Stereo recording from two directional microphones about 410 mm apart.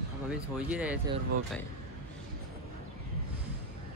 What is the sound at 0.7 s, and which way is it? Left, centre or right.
Speech, centre.